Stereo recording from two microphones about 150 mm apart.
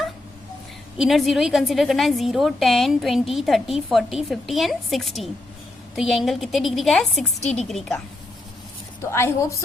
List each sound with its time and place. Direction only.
0.9 s a woman's voice: centre (ahead or behind)
7.4 s a woman's voice: 45° left (ahead or behind)
7.7 s a woman's voice: centre (ahead or behind)
9.0 s a woman's voice: 15° left (ahead or behind)